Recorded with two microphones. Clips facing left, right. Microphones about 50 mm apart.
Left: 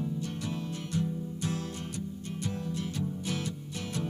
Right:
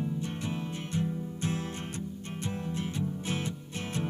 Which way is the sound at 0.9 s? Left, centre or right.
Right.